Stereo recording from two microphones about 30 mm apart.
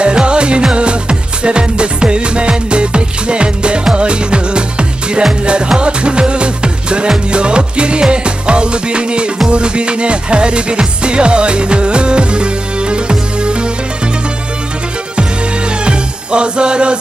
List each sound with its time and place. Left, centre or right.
0.0 s music: right
15.8 s music: right